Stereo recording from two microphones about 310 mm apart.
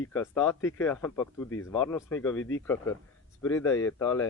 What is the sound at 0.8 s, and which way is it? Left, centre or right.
Speech, centre.